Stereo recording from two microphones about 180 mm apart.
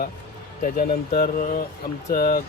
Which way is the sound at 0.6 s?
50° left (ahead or behind).